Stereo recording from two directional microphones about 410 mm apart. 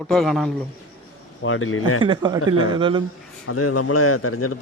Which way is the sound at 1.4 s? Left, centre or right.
Left.